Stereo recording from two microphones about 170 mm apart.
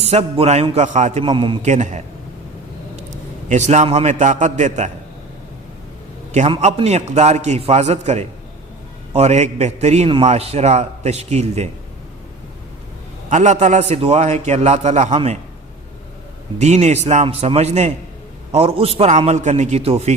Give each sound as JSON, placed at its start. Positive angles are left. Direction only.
{"t": 0.0, "sound": "a man's voice", "side_deg": -40}
{"t": 1.2, "sound": "a man's voice", "side_deg": -30}
{"t": 1.6, "sound": "a man's voice", "side_deg": -45}
{"t": 3.5, "sound": "a man's voice", "side_deg": -40}
{"t": 6.3, "sound": "a man's voice", "side_deg": -40}
{"t": 13.3, "sound": "a man's voice", "side_deg": -45}
{"t": 16.6, "sound": "a man's voice", "side_deg": -40}